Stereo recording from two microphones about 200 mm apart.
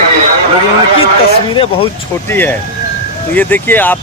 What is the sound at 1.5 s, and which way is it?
Speech, 25° left (ahead or behind).